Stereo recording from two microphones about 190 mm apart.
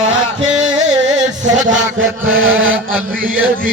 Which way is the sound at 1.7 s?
90° right.